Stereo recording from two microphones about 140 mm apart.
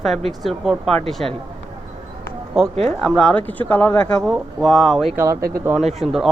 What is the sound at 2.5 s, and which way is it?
A man's voice, centre (ahead or behind).